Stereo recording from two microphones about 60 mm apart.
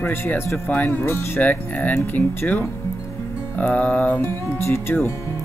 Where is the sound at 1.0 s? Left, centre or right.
Left.